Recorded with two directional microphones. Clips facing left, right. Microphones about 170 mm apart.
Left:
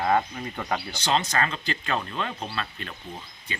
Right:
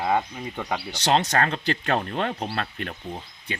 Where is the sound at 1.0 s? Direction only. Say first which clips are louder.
Right 4 dB; 70° right (ahead or behind).